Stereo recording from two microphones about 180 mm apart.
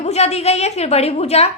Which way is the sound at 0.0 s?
35° left (ahead or behind).